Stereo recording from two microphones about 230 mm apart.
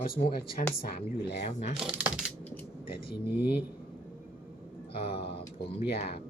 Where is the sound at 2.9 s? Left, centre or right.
Left.